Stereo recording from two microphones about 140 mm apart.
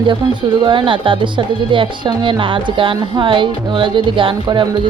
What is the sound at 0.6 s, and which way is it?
Speech, 35° right (ahead or behind).